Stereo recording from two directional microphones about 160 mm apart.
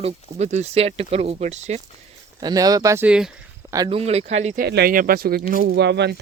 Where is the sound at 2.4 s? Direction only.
25° right (ahead or behind).